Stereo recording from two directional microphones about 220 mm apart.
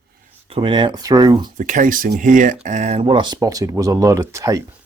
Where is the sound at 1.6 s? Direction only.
35° right (ahead or behind).